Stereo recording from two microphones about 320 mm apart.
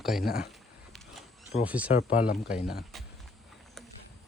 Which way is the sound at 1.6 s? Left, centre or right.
Centre.